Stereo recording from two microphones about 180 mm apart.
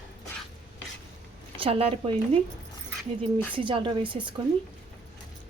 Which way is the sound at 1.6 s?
35° right (ahead or behind).